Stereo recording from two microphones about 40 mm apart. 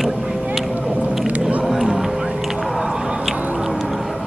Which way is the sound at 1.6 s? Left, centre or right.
Centre.